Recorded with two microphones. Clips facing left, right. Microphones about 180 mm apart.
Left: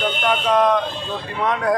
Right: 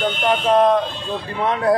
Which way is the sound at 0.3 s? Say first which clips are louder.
Right 2 dB; 30° right (ahead or behind).